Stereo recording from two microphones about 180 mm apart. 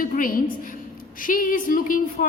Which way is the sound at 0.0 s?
50° left (ahead or behind).